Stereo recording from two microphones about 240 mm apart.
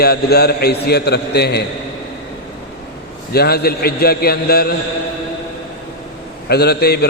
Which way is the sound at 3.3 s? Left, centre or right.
Left.